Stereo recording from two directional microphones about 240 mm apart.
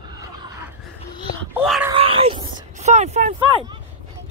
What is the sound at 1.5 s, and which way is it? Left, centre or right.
Speech, centre.